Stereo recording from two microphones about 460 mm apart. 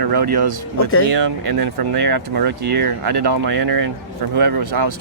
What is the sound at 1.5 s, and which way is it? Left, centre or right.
Speech, right.